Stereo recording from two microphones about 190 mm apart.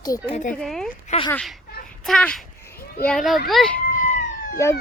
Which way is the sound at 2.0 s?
5° left (ahead or behind).